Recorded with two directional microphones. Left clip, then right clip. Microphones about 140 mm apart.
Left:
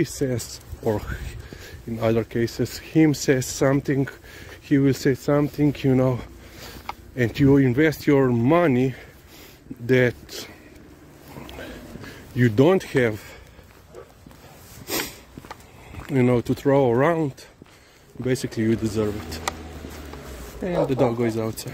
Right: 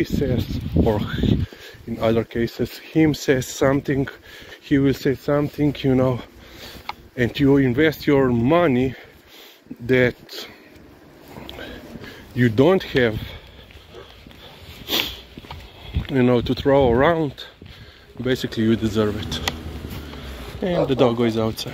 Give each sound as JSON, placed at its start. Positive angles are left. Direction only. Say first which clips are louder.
{"t": 0.0, "sound": "speech", "louder": "right 2 dB", "side_deg": 45}
{"t": 0.8, "sound": "speech", "louder": "right 2 dB", "side_deg": 30}
{"t": 2.4, "sound": "speech", "louder": "right 1 dB", "side_deg": 55}
{"t": 5.0, "sound": "speech", "louder": "even", "side_deg": 50}
{"t": 5.7, "sound": "speech", "louder": "right 2 dB", "side_deg": 30}
{"t": 12.4, "sound": "speech", "louder": "right 2 dB", "side_deg": 25}
{"t": 16.1, "sound": "speech", "louder": "right 2 dB", "side_deg": 30}
{"t": 19.0, "sound": "speech", "louder": "right 4 dB", "side_deg": 10}
{"t": 20.6, "sound": "speech", "louder": "right 3 dB", "side_deg": 0}